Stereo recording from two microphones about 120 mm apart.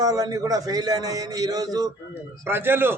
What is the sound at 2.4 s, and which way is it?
Speech, 20° right (ahead or behind).